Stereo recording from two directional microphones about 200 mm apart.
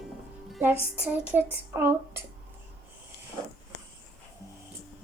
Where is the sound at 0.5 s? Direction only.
10° right (ahead or behind).